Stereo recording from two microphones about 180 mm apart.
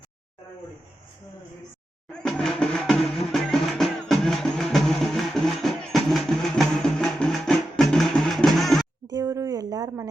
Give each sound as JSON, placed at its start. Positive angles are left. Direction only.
{"t": 2.1, "sound": "drum", "side_deg": 5}
{"t": 3.3, "sound": "music", "side_deg": 0}
{"t": 9.0, "sound": "a sound", "side_deg": -20}